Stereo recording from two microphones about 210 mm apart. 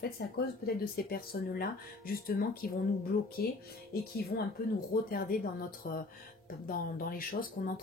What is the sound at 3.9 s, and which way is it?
Speech, 50° left (ahead or behind).